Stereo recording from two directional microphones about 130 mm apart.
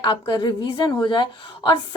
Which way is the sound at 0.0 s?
40° left (ahead or behind).